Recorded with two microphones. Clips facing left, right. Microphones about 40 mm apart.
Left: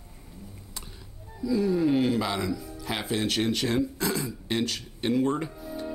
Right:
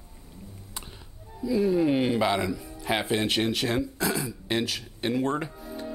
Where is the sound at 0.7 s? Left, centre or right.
Centre.